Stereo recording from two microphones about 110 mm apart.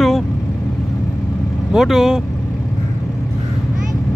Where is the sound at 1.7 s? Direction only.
5° right (ahead or behind).